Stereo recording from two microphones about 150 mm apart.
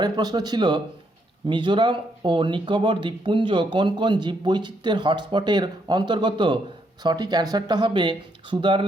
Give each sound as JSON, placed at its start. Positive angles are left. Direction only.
{"t": 0.0, "sound": "speech", "side_deg": -25}